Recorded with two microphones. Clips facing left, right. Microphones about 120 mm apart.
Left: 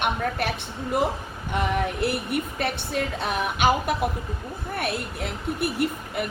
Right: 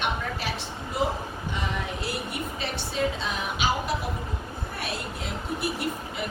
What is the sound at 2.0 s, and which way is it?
Speech, 60° left (ahead or behind).